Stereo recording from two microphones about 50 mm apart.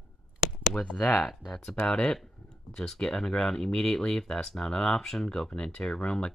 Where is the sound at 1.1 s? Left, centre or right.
Centre.